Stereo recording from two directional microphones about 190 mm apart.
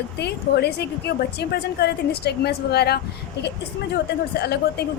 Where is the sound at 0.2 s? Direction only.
60° left (ahead or behind).